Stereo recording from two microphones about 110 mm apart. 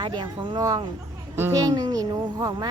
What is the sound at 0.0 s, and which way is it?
Speech, 40° right (ahead or behind).